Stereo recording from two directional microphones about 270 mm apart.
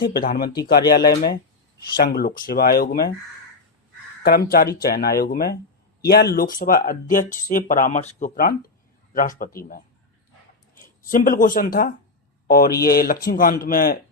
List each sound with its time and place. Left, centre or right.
0.0 s speech: left
4.2 s speech: left
11.1 s speech: left